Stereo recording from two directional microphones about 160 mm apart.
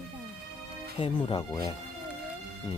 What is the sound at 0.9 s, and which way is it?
Speech, 30° left (ahead or behind).